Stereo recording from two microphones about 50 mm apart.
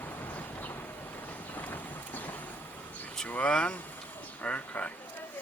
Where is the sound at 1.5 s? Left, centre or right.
Left.